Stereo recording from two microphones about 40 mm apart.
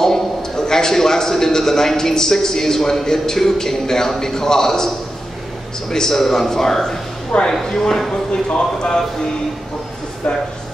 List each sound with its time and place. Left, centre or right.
0.0 s a man's voice: centre
7.3 s speech: left